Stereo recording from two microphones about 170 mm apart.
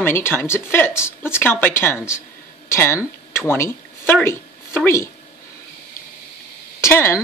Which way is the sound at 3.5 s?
15° left (ahead or behind).